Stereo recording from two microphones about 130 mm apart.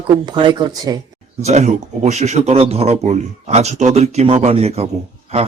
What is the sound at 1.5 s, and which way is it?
Speech, 60° right (ahead or behind).